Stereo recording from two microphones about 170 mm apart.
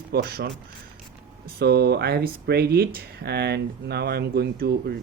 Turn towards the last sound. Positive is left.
turn(degrees=-65)  # may be behind; listen again after turning